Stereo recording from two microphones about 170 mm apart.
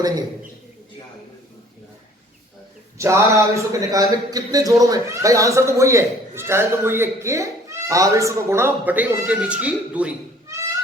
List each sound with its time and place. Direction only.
3.0 s speech: 15° right (ahead or behind)